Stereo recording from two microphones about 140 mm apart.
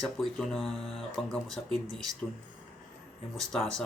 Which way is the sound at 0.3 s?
Centre (ahead or behind).